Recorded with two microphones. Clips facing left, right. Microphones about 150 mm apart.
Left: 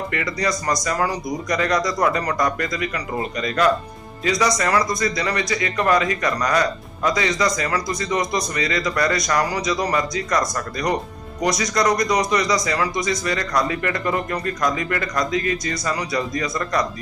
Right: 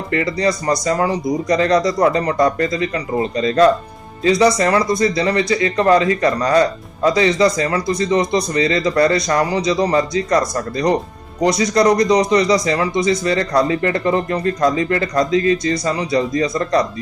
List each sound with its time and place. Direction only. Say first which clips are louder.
0.1 s speech: right 10 dB; 30° right (ahead or behind)